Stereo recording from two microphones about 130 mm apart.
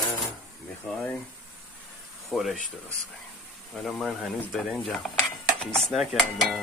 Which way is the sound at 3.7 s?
Centre (ahead or behind).